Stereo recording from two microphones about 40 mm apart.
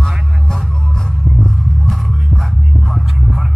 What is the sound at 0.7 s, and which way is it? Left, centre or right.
Music, centre.